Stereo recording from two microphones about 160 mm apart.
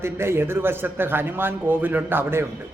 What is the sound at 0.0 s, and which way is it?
A man's voice, 15° right (ahead or behind).